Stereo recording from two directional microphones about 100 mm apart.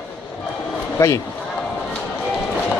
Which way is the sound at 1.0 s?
25° left (ahead or behind).